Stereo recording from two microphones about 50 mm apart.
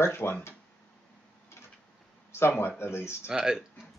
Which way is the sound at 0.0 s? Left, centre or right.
Left.